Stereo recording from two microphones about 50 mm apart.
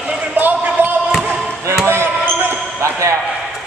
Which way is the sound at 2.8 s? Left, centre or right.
Right.